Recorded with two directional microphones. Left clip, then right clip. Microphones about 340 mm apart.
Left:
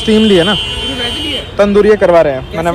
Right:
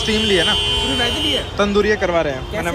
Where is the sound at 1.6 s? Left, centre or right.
Centre.